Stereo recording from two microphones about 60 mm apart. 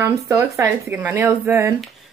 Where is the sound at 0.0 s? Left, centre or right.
Right.